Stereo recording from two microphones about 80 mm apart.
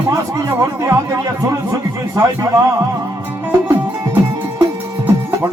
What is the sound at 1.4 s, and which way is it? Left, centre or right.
Speech, right.